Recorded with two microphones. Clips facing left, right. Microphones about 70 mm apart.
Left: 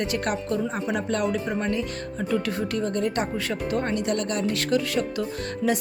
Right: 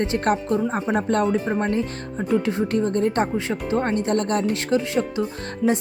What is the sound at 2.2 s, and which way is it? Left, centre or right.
A woman's voice, right.